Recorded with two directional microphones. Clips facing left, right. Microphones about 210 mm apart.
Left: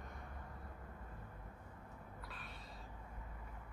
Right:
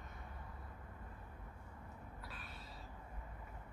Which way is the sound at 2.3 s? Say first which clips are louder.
Even; centre (ahead or behind).